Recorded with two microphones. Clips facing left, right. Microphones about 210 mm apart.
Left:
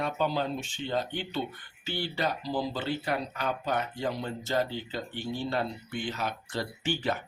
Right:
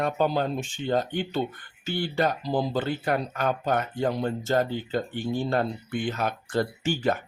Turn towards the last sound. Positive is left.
turn(degrees=-45)  # may be behind; listen again after turning